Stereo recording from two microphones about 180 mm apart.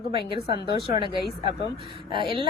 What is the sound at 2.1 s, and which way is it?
Speech, 30° right (ahead or behind).